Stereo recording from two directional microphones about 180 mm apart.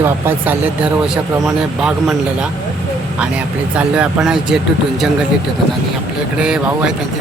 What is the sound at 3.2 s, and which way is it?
Speech, 5° right (ahead or behind).